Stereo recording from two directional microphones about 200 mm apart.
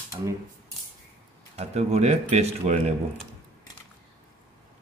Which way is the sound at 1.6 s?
30° right (ahead or behind).